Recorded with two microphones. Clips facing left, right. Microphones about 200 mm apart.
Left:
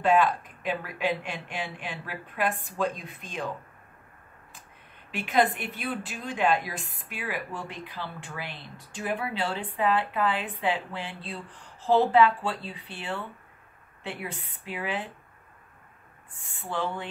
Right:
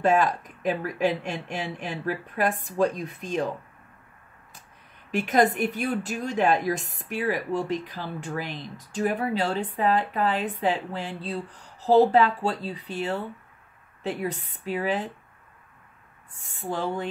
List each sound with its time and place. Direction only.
0.0 s speech: 40° right (ahead or behind)
5.1 s speech: 45° right (ahead or behind)
16.3 s speech: 40° right (ahead or behind)